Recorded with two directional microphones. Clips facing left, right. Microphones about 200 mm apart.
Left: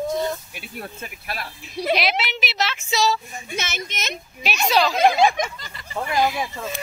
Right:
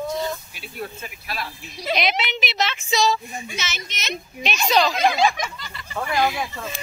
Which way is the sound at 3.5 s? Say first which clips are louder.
Left 3 dB; 55° left (ahead or behind).